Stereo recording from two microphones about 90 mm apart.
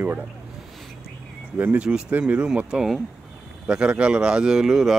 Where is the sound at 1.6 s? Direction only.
15° right (ahead or behind).